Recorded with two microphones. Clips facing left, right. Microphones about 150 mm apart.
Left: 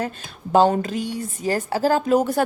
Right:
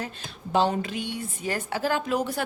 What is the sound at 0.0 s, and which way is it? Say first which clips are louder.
A woman's voice: left 7 dB; 45° left (ahead or behind).